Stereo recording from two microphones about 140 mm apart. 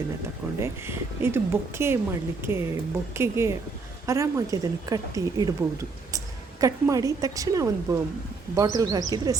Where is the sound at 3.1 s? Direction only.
20° right (ahead or behind).